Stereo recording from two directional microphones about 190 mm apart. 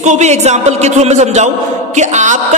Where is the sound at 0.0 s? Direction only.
40° right (ahead or behind).